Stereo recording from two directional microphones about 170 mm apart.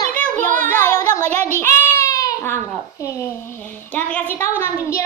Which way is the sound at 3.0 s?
20° left (ahead or behind).